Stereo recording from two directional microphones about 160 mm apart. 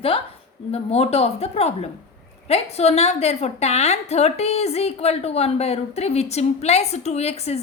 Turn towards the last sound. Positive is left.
turn(degrees=40)  # may be behind; listen again after turning